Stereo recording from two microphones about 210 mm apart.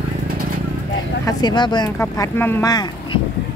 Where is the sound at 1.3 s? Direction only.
20° left (ahead or behind).